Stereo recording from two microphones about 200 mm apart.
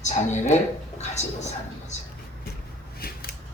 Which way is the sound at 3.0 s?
50° left (ahead or behind).